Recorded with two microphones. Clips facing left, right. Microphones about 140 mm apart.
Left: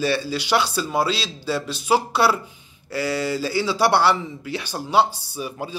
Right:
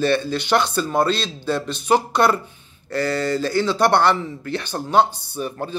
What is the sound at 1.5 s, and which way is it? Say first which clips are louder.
A man's voice: right 2 dB; 10° left (ahead or behind).